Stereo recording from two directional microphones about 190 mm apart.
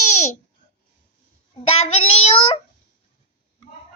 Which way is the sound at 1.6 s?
35° left (ahead or behind).